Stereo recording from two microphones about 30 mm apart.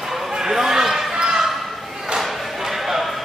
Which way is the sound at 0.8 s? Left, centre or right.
Centre.